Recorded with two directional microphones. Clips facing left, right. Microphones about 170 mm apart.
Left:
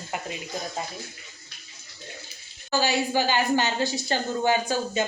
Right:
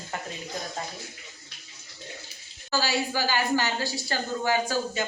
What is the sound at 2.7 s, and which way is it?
A woman's voice, 20° left (ahead or behind).